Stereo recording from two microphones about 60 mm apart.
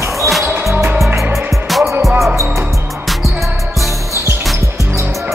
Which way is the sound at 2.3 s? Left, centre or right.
Right.